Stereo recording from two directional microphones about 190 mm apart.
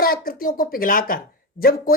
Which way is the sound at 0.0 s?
50° left (ahead or behind).